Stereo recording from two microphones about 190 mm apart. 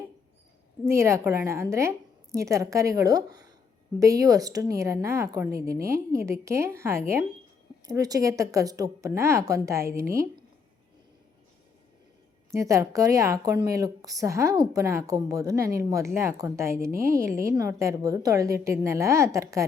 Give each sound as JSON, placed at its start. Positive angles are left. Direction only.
{"t": 0.9, "sound": "a woman's voice", "side_deg": -15}
{"t": 12.5, "sound": "a woman's voice", "side_deg": -15}